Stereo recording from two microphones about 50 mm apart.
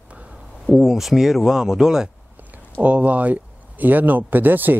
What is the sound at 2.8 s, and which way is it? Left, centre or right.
Speech, right.